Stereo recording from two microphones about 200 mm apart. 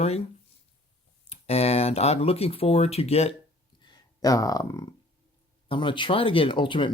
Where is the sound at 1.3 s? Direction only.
30° left (ahead or behind).